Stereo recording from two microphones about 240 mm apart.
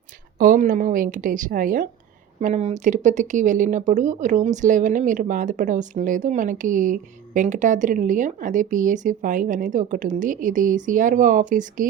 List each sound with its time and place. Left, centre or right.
0.3 s speech: right